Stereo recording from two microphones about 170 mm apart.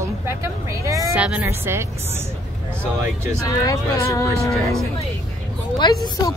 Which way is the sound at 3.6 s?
20° left (ahead or behind).